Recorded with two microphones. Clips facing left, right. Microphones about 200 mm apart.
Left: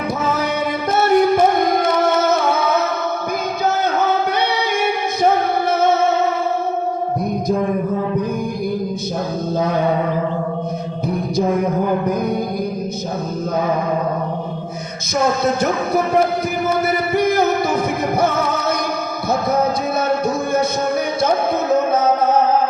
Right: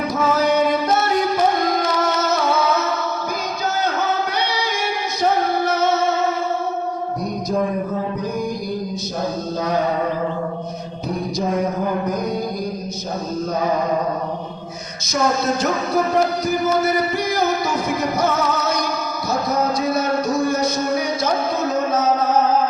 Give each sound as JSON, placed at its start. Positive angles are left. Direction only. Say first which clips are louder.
{"t": 0.4, "sound": "music", "louder": "right 3 dB", "side_deg": 55}
{"t": 5.2, "sound": "music", "louder": "left 2 dB", "side_deg": 55}
{"t": 16.8, "sound": "music", "louder": "left 3 dB", "side_deg": 60}
{"t": 19.3, "sound": "a sound", "louder": "left 3 dB", "side_deg": 55}